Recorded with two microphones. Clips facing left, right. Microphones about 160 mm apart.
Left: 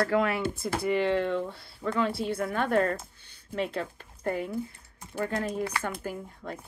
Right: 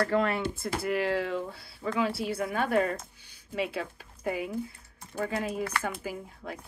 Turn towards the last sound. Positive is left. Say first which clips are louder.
# left 1 dB
turn(degrees=-5)  # may be behind; listen again after turning